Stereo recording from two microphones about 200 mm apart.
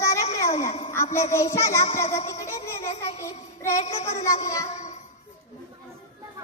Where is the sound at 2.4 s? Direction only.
15° left (ahead or behind).